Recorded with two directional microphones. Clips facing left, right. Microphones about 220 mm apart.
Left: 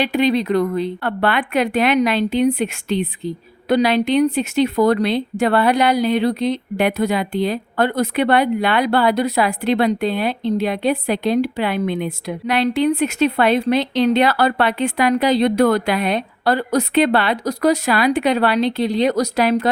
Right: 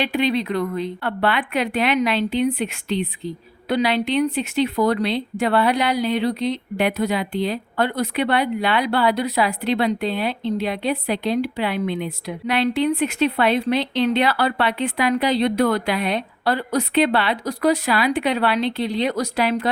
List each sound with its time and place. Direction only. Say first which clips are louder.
0.0 s speech: left 4 dB; 40° left (ahead or behind)